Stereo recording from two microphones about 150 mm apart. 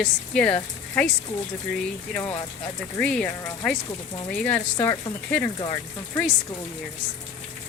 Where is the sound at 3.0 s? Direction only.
5° left (ahead or behind).